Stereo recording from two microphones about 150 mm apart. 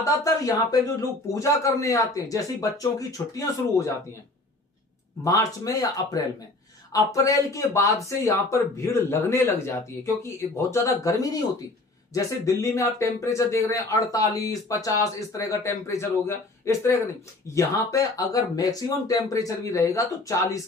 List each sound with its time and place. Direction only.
0.0 s speech: 20° left (ahead or behind)
5.2 s speech: 25° left (ahead or behind)
12.6 s speech: 20° left (ahead or behind)